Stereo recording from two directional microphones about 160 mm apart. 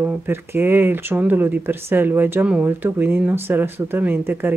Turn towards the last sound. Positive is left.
turn(degrees=-15)  # may be behind; listen again after turning